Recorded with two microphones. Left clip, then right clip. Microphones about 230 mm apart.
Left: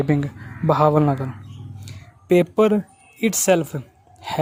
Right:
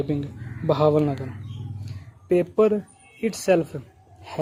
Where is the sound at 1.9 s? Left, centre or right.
Left.